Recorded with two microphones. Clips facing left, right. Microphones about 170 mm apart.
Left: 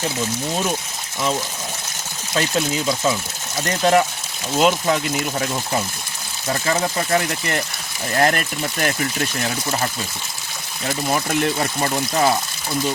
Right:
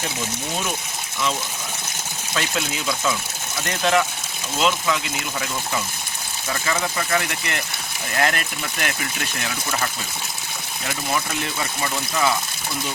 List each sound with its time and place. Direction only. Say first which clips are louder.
2.3 s speech: left 5 dB; 30° left (ahead or behind)
10.8 s speech: left 4 dB; 50° left (ahead or behind)